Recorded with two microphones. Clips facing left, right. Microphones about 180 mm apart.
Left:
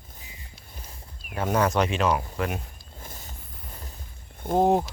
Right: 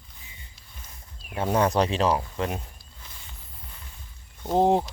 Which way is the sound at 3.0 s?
45° left (ahead or behind).